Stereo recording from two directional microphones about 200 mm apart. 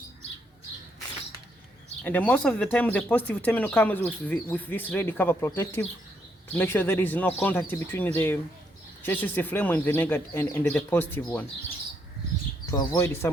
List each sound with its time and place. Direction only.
2.0 s speech: 10° left (ahead or behind)
12.7 s speech: 20° left (ahead or behind)